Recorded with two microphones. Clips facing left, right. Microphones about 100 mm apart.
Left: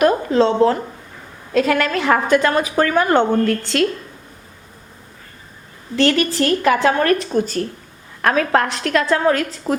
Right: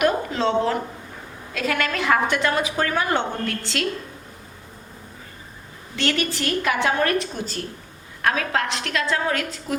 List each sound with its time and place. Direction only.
0.0 s a sound: 35° left (ahead or behind)
1.5 s a woman's voice: 35° left (ahead or behind)
6.0 s a woman's voice: 35° left (ahead or behind)